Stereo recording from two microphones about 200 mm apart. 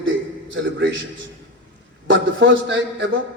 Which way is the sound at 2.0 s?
65° right (ahead or behind).